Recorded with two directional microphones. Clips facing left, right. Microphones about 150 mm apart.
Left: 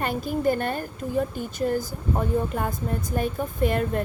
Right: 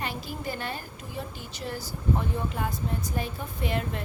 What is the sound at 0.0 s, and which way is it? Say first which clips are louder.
A woman's voice: left 10 dB; 50° left (ahead or behind).